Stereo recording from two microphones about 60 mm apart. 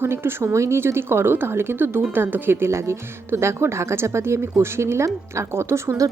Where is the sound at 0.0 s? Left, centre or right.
Right.